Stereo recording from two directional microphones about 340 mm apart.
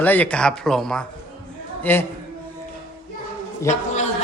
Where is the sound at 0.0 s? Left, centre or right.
Centre.